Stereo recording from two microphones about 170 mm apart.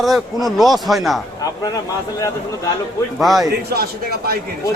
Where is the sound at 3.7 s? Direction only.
65° right (ahead or behind).